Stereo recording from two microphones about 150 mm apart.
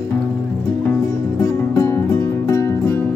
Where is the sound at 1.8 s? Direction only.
15° left (ahead or behind).